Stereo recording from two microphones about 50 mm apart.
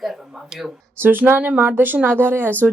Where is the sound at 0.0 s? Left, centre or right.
Centre.